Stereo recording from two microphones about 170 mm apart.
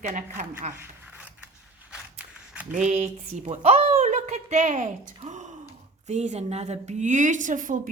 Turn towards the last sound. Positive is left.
turn(degrees=-50)  # may be behind; listen again after turning